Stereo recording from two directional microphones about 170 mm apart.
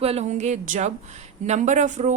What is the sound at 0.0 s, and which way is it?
Speech, 40° right (ahead or behind).